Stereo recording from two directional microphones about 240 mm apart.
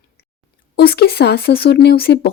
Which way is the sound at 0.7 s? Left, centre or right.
Left.